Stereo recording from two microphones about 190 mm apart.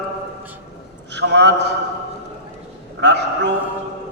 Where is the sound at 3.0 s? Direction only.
65° right (ahead or behind).